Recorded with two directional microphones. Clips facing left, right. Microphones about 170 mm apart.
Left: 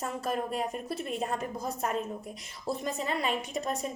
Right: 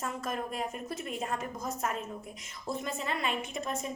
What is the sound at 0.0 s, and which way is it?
A woman's voice, 35° left (ahead or behind).